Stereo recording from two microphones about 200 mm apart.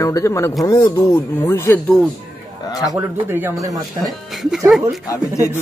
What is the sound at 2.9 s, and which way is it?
Speech, 10° right (ahead or behind).